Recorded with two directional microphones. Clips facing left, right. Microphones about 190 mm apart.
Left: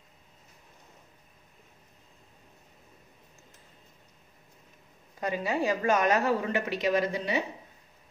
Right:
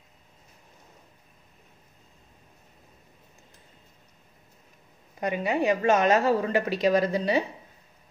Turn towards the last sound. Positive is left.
turn(degrees=-35)  # may be behind; listen again after turning